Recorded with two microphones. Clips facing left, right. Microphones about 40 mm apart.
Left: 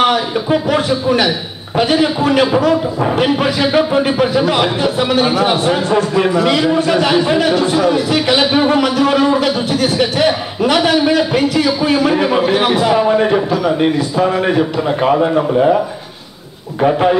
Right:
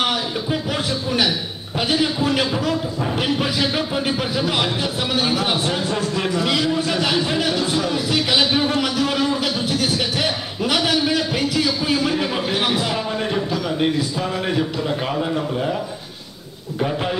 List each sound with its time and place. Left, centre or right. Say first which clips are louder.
0.0 s speech: left 8 dB; centre
16.8 s speech: left 11 dB; centre